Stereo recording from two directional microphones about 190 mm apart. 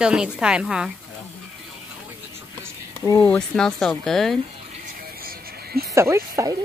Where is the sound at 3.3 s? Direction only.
5° left (ahead or behind).